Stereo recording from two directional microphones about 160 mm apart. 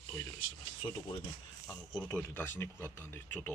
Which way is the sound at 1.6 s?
20° left (ahead or behind).